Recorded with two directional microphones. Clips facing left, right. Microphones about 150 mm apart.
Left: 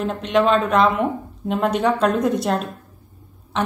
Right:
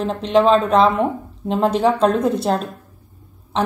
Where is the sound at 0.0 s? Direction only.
30° right (ahead or behind).